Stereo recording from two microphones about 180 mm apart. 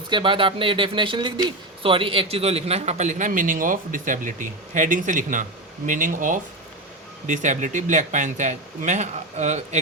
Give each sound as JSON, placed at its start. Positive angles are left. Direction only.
{"t": 0.1, "sound": "speech", "side_deg": -30}